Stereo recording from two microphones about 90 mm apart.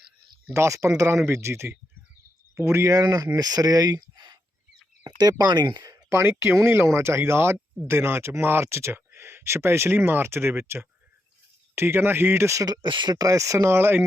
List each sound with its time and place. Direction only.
0.5 s speech: 35° right (ahead or behind)
6.1 s speech: 30° right (ahead or behind); by 12.9 s 45° right (ahead or behind)
12.9 s speech: 60° right (ahead or behind)
13.1 s speech: 40° right (ahead or behind)